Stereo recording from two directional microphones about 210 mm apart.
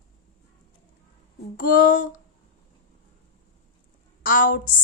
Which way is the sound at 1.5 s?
40° left (ahead or behind).